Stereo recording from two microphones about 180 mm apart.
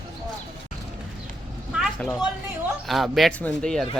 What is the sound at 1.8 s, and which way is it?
Speech, centre (ahead or behind).